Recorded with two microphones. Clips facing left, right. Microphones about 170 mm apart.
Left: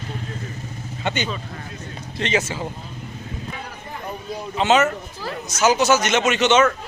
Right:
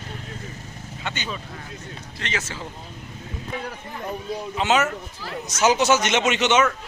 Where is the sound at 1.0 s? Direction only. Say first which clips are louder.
Left 6 dB; 20° left (ahead or behind).